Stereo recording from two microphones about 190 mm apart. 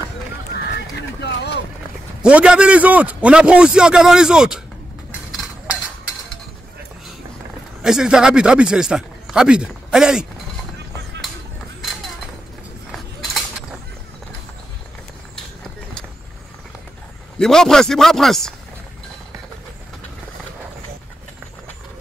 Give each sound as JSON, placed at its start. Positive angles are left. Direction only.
{"t": 0.6, "sound": "horse", "side_deg": 60}
{"t": 2.2, "sound": "speech", "side_deg": -5}
{"t": 7.8, "sound": "speech", "side_deg": -5}
{"t": 12.9, "sound": "mechanisms", "side_deg": 0}
{"t": 17.4, "sound": "speech", "side_deg": 0}